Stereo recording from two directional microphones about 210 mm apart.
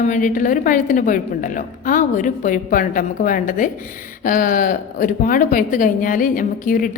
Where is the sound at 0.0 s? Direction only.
40° left (ahead or behind).